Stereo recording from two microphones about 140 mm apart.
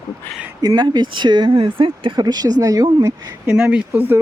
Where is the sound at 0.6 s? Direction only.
30° right (ahead or behind).